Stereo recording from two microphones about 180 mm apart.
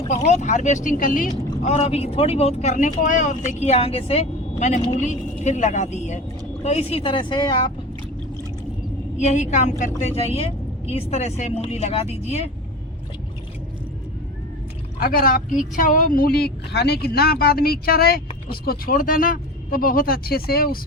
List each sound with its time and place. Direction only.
0.1 s speech: 40° left (ahead or behind)
9.1 s speech: 40° left (ahead or behind)
15.0 s speech: 55° left (ahead or behind)